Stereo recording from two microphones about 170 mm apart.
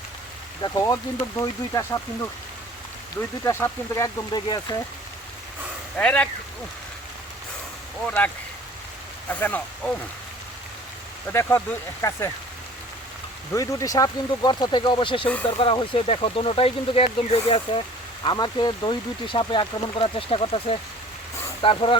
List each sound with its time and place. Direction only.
0.6 s speech: 20° left (ahead or behind)
6.0 s speech: 5° left (ahead or behind)
8.0 s speech: 10° left (ahead or behind)
9.3 s speech: 10° left (ahead or behind)
11.3 s speech: 15° left (ahead or behind)
13.5 s speech: 20° left (ahead or behind)